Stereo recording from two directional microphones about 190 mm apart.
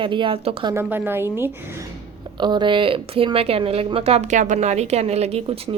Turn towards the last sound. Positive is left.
turn(degrees=-35)  # may be behind; listen again after turning